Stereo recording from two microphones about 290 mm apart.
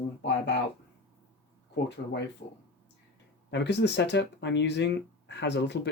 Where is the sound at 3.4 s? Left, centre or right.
Left.